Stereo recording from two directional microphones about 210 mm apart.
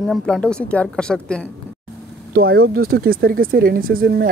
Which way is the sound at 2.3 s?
50° right (ahead or behind).